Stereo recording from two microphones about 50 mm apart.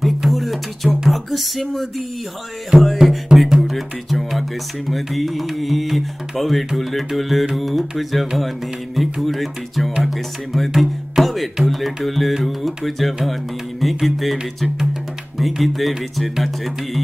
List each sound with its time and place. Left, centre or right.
0.0 s music: centre
2.7 s speech: centre
10.7 s music: centre
11.7 s speech: centre